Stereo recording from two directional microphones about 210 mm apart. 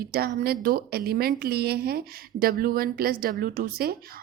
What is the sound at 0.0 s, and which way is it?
Speech, 45° right (ahead or behind).